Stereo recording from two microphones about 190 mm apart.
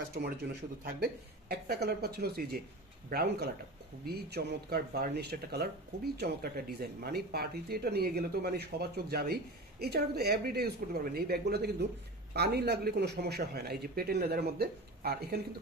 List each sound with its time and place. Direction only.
0.2 s speech: 55° right (ahead or behind)